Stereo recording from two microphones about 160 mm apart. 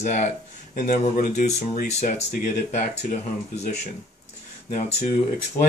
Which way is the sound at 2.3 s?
55° left (ahead or behind).